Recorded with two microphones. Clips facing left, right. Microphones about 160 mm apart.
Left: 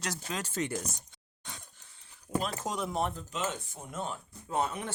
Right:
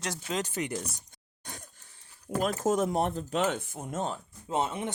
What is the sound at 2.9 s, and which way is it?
Speech, 60° right (ahead or behind).